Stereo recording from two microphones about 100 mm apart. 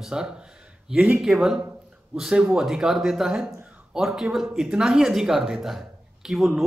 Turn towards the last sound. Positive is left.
turn(degrees=-5)  # may be behind; listen again after turning